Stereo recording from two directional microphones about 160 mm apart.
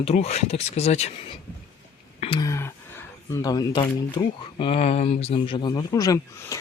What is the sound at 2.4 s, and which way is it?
Camera, 15° left (ahead or behind).